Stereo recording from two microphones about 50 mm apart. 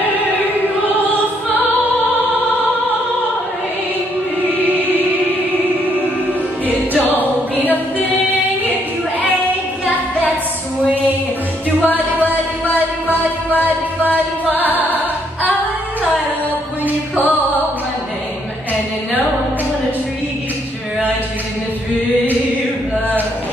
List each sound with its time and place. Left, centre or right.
4.6 s music: right
6.9 s music: left
11.8 s music: left
13.6 s music: left